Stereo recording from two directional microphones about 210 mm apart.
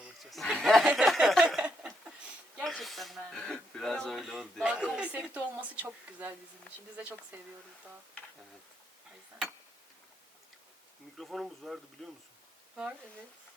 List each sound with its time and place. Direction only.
0.0 s snicker: centre (ahead or behind)
2.6 s a sound: centre (ahead or behind)
6.9 s speech: 5° right (ahead or behind)
11.2 s speech: centre (ahead or behind)